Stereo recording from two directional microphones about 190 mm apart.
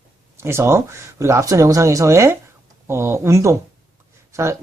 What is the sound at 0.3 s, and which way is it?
Speech, 15° right (ahead or behind).